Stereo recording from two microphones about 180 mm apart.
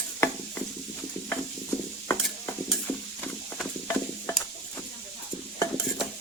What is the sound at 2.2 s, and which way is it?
Stir, 5° left (ahead or behind).